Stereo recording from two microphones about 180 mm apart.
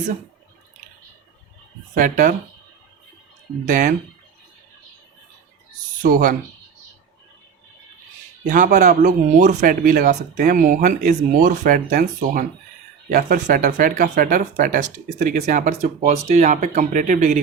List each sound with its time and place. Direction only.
2.0 s speech: 45° right (ahead or behind)
3.7 s speech: 45° right (ahead or behind)
6.0 s speech: 50° right (ahead or behind)
8.4 s speech: 45° right (ahead or behind)